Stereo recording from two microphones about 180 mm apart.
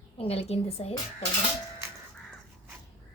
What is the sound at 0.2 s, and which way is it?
Speech, 35° left (ahead or behind).